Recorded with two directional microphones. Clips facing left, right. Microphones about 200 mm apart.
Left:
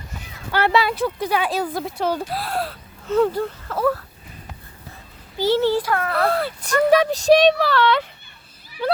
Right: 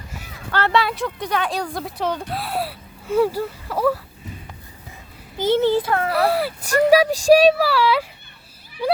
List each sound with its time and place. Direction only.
0.5 s speech: 5° left (ahead or behind); by 4.0 s 10° right (ahead or behind)
5.4 s a child's voice: 20° right (ahead or behind)
6.1 s speech: 10° right (ahead or behind)
8.8 s a sound: 10° right (ahead or behind)